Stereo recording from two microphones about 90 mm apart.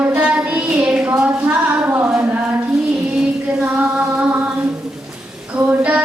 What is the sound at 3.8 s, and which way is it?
Music, 15° right (ahead or behind).